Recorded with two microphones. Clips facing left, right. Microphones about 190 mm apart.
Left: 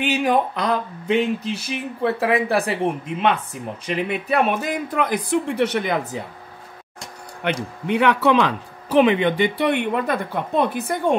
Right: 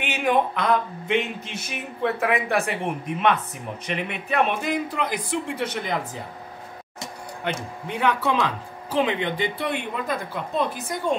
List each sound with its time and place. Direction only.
0.0 s a sound: 35° left (ahead or behind)
3.8 s speech: 35° left (ahead or behind); by 5.9 s 65° left (ahead or behind)
7.4 s speech: 70° left (ahead or behind)